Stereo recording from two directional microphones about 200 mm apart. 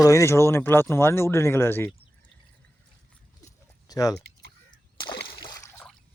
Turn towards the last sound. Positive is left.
turn(degrees=20)  # may be behind; listen again after turning